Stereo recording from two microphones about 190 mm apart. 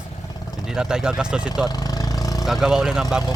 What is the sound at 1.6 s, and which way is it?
Vehicle, 20° left (ahead or behind).